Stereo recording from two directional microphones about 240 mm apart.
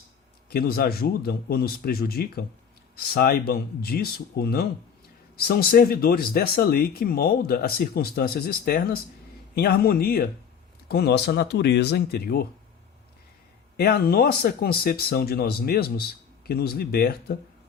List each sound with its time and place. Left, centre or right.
0.5 s speech: left
13.7 s speech: left